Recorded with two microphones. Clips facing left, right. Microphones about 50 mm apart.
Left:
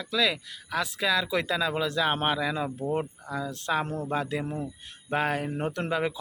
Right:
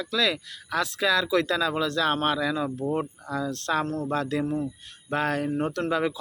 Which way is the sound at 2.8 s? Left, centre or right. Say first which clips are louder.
Right 2 dB; centre.